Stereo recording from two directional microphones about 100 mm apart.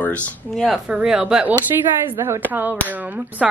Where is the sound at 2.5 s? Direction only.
20° right (ahead or behind).